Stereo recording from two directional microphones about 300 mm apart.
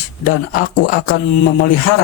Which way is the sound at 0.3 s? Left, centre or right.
Left.